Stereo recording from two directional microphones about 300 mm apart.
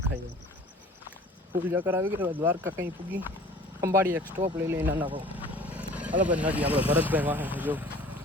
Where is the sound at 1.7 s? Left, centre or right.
Centre.